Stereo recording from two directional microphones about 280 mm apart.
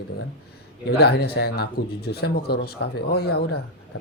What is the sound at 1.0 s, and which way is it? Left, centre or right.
Speech, left.